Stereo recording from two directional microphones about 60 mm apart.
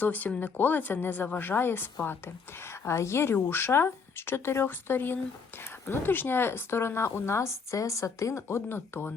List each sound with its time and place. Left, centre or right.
0.0 s a woman's voice: left